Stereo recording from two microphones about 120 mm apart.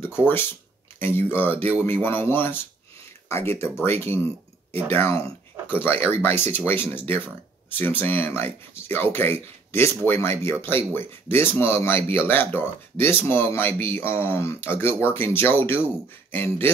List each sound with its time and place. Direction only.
0.9 s speech: 15° left (ahead or behind)